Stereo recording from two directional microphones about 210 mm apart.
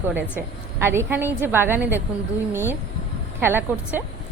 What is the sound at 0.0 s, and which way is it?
A woman's voice, 10° right (ahead or behind).